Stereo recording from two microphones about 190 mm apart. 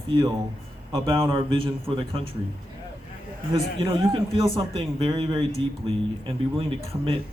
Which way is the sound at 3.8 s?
30° right (ahead or behind).